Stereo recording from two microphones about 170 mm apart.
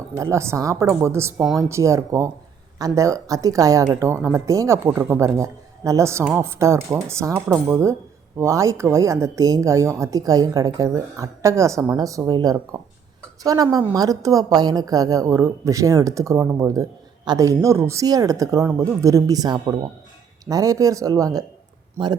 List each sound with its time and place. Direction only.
0.2 s a woman's voice: 15° right (ahead or behind)